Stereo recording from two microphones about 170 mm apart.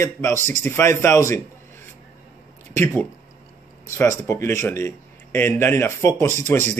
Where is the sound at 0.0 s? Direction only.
15° left (ahead or behind).